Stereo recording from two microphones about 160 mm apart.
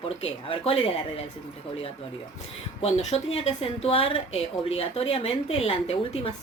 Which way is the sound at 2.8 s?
40° left (ahead or behind).